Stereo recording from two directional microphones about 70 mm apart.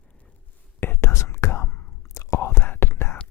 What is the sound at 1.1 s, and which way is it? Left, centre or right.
Whispering, left.